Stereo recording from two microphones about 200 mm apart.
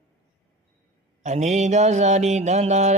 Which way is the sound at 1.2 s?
35° right (ahead or behind).